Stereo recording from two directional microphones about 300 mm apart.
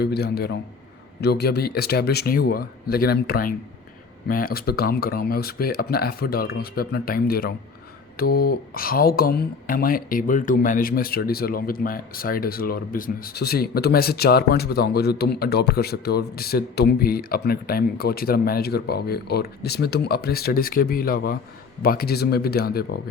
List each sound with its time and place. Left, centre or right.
0.0 s speech: left